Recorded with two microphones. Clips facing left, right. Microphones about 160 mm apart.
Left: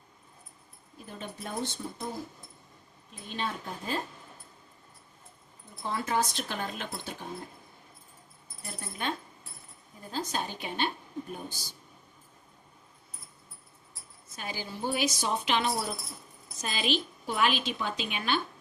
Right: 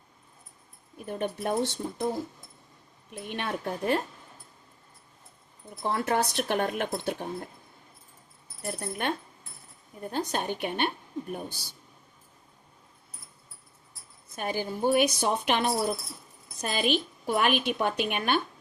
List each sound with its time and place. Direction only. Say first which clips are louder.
0.9 s a woman's voice: right 10 dB; 60° right (ahead or behind)
3.1 s a woman's voice: right 3 dB; 65° right (ahead or behind)
5.8 s a woman's voice: right 3 dB; 60° right (ahead or behind)
8.6 s a woman's voice: right 5 dB; 60° right (ahead or behind)
14.3 s a woman's voice: right 7 dB; 55° right (ahead or behind)